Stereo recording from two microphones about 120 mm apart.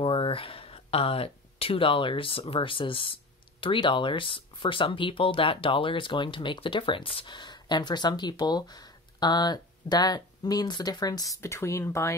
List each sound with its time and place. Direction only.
0.0 s speech: 50° left (ahead or behind); by 12.2 s 20° left (ahead or behind)